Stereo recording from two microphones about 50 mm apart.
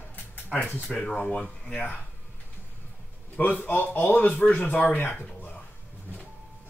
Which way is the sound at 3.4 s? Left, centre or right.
Left.